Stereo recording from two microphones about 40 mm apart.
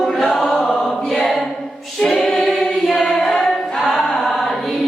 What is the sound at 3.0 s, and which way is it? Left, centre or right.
Singing, centre.